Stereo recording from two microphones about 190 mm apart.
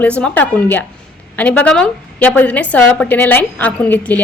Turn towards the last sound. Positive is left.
turn(degrees=10)  # may be behind; listen again after turning